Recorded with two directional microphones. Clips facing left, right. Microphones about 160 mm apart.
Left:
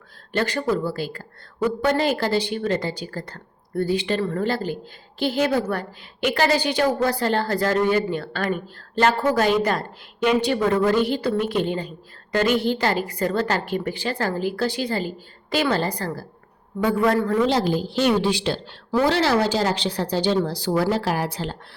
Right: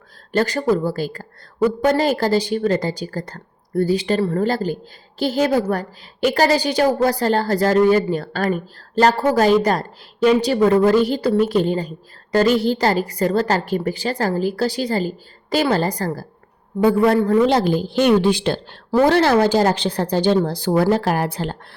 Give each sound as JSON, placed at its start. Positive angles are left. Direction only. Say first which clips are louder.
{"t": 0.3, "sound": "a woman's voice", "louder": "right 4 dB", "side_deg": -40}
{"t": 16.7, "sound": "a man's voice", "louder": "right 7 dB", "side_deg": -25}
{"t": 17.5, "sound": "a woman's voice", "louder": "right 4 dB", "side_deg": -55}